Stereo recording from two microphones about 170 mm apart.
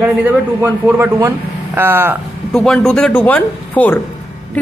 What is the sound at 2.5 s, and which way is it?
A man's voice, 5° left (ahead or behind).